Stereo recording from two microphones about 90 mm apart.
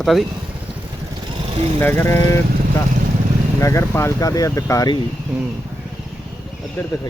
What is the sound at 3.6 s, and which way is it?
Speech, 30° left (ahead or behind).